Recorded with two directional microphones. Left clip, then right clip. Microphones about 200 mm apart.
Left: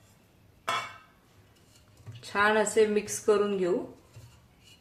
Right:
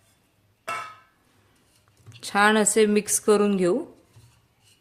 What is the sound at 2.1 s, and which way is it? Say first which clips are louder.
A woman's voice: right 5 dB; 55° right (ahead or behind).